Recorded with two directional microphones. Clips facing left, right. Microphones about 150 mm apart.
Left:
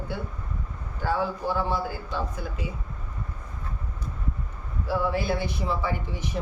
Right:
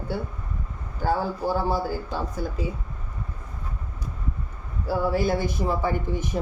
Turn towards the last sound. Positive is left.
turn(degrees=-50)  # may be behind; listen again after turning